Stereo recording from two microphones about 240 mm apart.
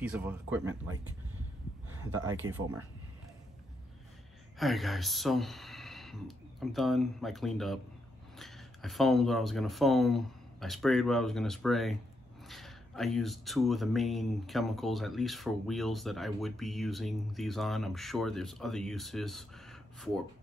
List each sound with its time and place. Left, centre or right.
0.1 s speech: centre
2.0 s speech: right
4.6 s speech: centre